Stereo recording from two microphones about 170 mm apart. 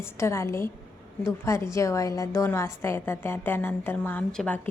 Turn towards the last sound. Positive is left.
turn(degrees=10)  # may be behind; listen again after turning